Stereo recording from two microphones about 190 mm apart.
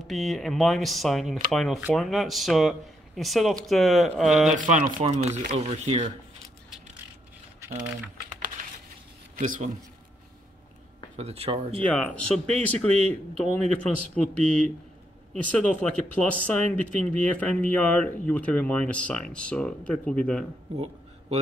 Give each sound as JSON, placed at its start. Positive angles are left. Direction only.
{"t": 0.0, "sound": "speech", "side_deg": 0}
{"t": 4.8, "sound": "speech", "side_deg": -35}
{"t": 9.4, "sound": "a man's voice", "side_deg": -45}
{"t": 11.1, "sound": "speech", "side_deg": -35}
{"t": 11.8, "sound": "speech", "side_deg": 5}
{"t": 20.7, "sound": "a sound", "side_deg": -30}